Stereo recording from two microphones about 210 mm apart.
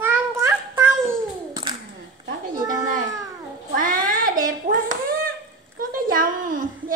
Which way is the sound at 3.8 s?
40° right (ahead or behind).